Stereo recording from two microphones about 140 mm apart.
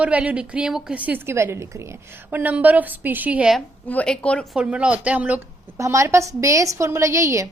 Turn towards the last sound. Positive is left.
turn(degrees=-20)  # may be behind; listen again after turning